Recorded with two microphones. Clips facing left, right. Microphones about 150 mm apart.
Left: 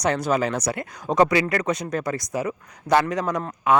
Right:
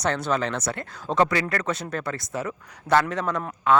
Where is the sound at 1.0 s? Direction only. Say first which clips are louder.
Left 3 dB; 20° left (ahead or behind).